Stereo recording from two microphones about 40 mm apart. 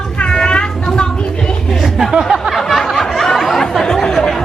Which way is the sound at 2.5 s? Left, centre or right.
Centre.